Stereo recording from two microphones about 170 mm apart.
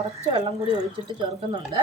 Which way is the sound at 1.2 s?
25° right (ahead or behind).